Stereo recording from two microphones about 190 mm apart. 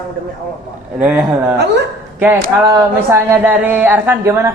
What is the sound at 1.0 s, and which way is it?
Speech, 5° right (ahead or behind).